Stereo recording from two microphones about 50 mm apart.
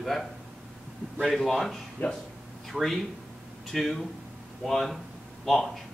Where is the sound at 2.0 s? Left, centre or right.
Left.